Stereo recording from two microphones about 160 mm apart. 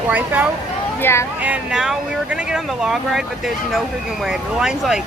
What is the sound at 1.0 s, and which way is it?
Speech, 15° left (ahead or behind).